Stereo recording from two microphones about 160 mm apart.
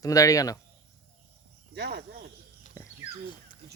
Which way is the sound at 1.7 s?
90° right.